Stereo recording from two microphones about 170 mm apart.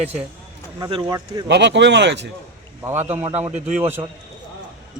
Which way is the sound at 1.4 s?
85° right.